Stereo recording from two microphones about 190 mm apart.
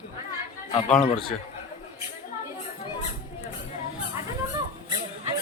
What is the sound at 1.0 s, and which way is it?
Speech, 30° left (ahead or behind).